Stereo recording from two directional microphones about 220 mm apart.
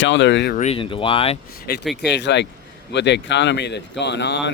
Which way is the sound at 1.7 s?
45° left (ahead or behind).